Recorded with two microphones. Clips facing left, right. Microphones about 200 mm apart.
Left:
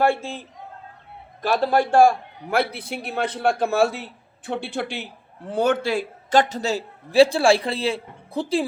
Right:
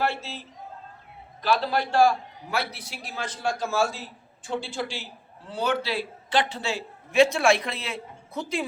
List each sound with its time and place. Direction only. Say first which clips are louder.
0.0 s a man's voice: left 7 dB; 50° left (ahead or behind); by 8.6 s 30° left (ahead or behind)